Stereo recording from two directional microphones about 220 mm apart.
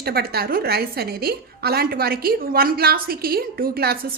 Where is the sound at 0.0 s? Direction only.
45° right (ahead or behind).